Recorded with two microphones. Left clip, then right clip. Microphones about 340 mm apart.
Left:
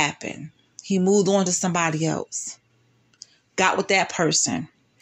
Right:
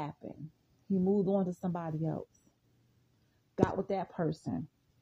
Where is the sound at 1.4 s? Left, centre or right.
Right.